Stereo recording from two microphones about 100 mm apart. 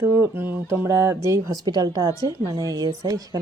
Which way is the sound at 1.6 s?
40° right (ahead or behind).